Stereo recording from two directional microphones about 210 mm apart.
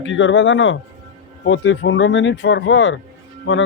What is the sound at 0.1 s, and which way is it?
Speech, 60° left (ahead or behind).